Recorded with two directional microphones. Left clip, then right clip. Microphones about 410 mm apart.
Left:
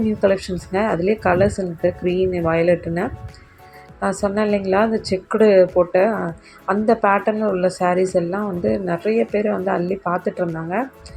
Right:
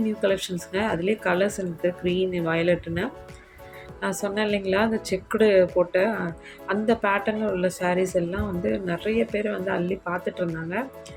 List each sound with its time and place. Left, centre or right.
0.2 s speech: centre